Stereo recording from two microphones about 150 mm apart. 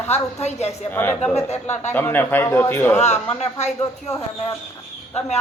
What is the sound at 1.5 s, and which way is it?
Speech, 50° left (ahead or behind).